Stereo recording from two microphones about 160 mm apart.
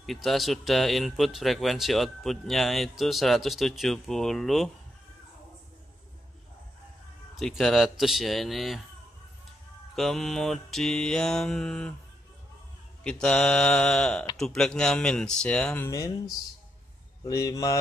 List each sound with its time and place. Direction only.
0.0 s speech: centre (ahead or behind)
7.3 s speech: centre (ahead or behind)
9.9 s speech: centre (ahead or behind)
13.0 s speech: 5° left (ahead or behind); by 17.7 s 20° left (ahead or behind)